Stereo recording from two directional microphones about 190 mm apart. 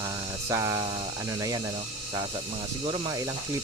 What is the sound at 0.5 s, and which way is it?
Speech, 15° right (ahead or behind).